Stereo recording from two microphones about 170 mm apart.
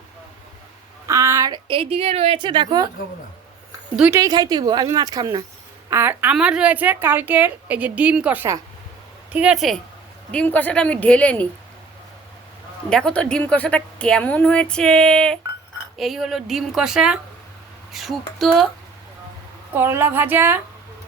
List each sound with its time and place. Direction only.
1.0 s a woman's voice: 20° right (ahead or behind)
3.9 s a woman's voice: 10° right (ahead or behind)
4.2 s a woman's voice: 20° right (ahead or behind); by 11.4 s 10° left (ahead or behind)
12.9 s a woman's voice: 5° left (ahead or behind)
19.7 s a woman's voice: 15° right (ahead or behind)